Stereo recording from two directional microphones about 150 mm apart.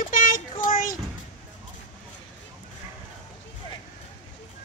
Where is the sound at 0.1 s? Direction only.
65° left (ahead or behind).